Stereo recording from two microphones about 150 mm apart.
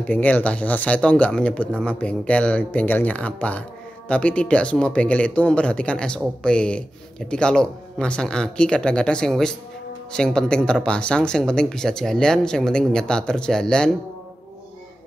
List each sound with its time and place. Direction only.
0.0 s speech: 10° left (ahead or behind)